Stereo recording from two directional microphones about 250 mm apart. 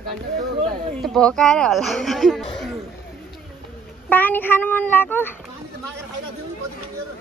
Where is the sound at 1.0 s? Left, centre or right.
Centre.